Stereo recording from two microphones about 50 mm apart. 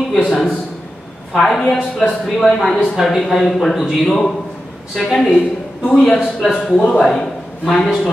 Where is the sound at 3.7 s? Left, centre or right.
Centre.